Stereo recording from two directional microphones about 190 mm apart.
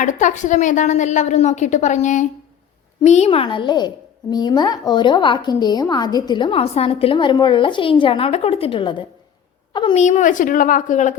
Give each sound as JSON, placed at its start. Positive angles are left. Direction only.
{"t": 0.0, "sound": "a woman's voice", "side_deg": 40}
{"t": 9.9, "sound": "a woman's voice", "side_deg": 40}